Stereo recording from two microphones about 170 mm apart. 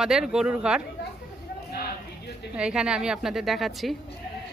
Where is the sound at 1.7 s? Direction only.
70° left (ahead or behind).